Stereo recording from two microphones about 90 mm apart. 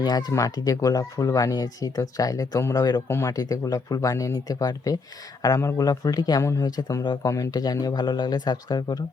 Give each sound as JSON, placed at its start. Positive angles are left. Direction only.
{"t": 0.0, "sound": "speech", "side_deg": 50}
{"t": 3.1, "sound": "speech", "side_deg": 30}